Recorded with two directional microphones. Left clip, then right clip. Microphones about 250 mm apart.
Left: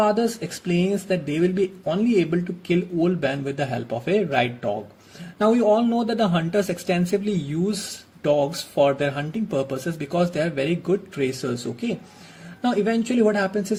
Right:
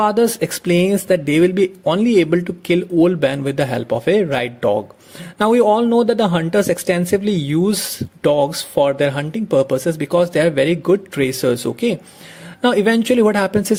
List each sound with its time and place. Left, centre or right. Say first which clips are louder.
0.0 s speech: right 6 dB; right